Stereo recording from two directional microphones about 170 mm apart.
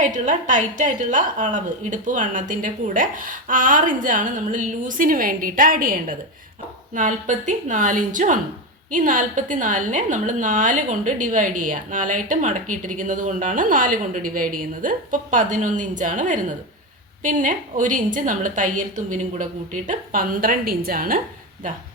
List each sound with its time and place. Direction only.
0.0 s a woman's voice: 50° right (ahead or behind)